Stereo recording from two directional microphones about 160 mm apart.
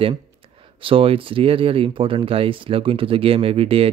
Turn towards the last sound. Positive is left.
turn(degrees=-35)  # may be behind; listen again after turning